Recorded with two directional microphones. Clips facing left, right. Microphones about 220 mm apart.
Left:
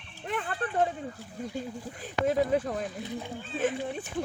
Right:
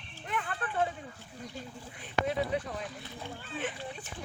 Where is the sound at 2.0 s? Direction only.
45° left (ahead or behind).